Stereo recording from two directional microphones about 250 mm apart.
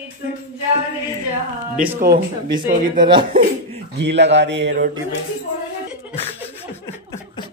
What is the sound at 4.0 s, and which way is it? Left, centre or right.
Speech, right.